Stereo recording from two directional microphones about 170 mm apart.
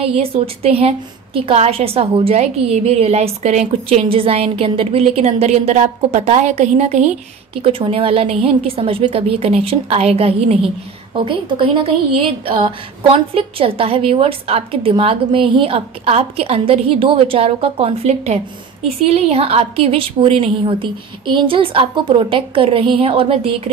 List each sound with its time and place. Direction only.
0.0 s a woman's voice: 35° right (ahead or behind)